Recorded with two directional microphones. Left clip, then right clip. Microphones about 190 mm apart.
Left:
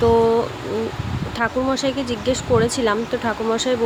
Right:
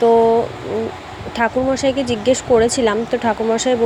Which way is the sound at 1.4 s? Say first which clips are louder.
Right 4 dB; 10° right (ahead or behind).